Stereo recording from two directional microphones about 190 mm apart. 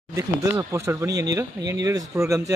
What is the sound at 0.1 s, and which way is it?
Speech, 15° right (ahead or behind).